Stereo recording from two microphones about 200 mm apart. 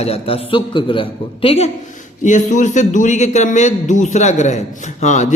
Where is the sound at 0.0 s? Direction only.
30° left (ahead or behind).